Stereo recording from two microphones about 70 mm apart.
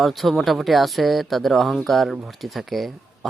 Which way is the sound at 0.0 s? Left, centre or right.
Centre.